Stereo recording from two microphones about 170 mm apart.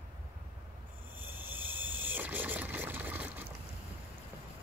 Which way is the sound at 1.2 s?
10° right (ahead or behind).